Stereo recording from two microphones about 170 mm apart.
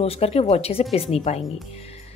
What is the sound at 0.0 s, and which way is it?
A woman's voice, 35° left (ahead or behind).